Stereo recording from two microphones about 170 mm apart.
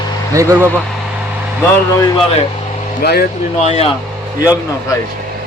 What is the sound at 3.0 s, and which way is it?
Speech, 70° left (ahead or behind).